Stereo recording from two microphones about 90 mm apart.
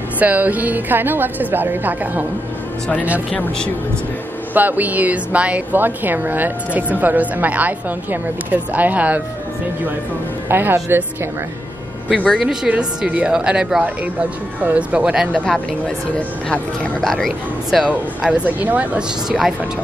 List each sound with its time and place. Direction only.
0.2 s a woman's voice: 15° right (ahead or behind)
3.3 s speech: 10° left (ahead or behind)
4.6 s a woman's voice: 20° right (ahead or behind)
10.5 s a woman's voice: 25° right (ahead or behind)
12.3 s a woman's voice: 5° right (ahead or behind)
15.3 s speech: 10° left (ahead or behind)
17.0 s speech: centre (ahead or behind)
18.2 s a woman's voice: 15° right (ahead or behind)
19.2 s speech: 5° right (ahead or behind)